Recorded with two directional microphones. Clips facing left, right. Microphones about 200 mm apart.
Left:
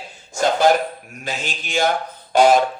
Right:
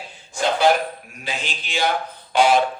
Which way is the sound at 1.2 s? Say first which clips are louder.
Left 2 dB; 45° left (ahead or behind).